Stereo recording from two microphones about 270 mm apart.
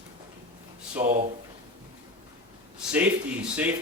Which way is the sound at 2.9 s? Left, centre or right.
Centre.